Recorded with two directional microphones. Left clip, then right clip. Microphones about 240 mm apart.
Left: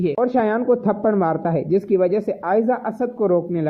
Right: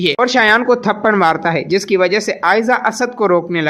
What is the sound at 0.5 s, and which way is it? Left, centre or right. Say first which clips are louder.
Speech: right 6 dB; right.